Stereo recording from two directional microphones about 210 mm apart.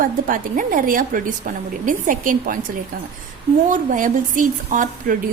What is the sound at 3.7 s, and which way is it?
A woman's voice, 40° right (ahead or behind).